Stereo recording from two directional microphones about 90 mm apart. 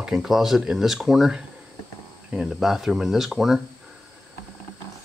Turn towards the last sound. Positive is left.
turn(degrees=-5)  # may be behind; listen again after turning